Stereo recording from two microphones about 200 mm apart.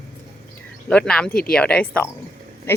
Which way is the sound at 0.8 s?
5° left (ahead or behind).